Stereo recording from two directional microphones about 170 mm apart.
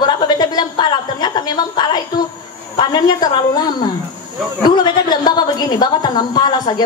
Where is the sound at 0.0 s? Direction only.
25° left (ahead or behind).